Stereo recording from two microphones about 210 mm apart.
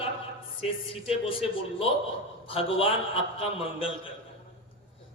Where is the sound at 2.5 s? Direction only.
25° left (ahead or behind).